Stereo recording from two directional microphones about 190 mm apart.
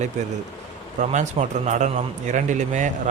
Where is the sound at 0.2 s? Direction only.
40° right (ahead or behind).